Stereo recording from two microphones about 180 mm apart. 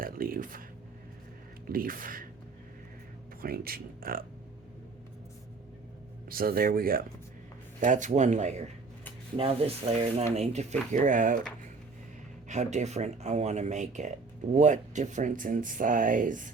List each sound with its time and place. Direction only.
0.0 s speech: 55° right (ahead or behind)
1.6 s speech: 55° right (ahead or behind)
3.4 s speech: 55° right (ahead or behind)
6.2 s speech: 55° right (ahead or behind)
12.5 s speech: 40° right (ahead or behind)